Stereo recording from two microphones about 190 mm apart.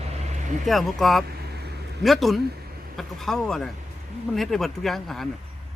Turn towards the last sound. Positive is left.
turn(degrees=0)  # may be behind; listen again after turning